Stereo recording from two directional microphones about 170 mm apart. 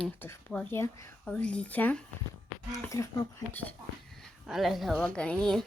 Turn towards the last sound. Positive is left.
turn(degrees=5)  # may be behind; listen again after turning